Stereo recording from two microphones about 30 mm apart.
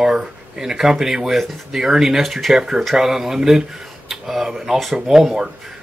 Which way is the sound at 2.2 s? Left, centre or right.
Centre.